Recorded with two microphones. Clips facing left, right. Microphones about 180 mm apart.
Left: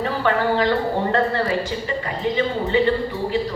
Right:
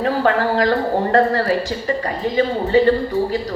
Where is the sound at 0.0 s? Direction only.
40° right (ahead or behind).